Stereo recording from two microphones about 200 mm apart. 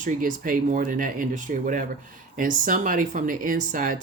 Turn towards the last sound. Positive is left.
turn(degrees=-40)  # may be behind; listen again after turning